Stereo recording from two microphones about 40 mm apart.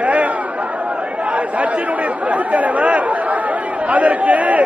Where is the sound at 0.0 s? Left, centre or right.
Right.